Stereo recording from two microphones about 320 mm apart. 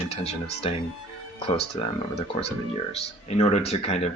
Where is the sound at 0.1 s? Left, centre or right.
Centre.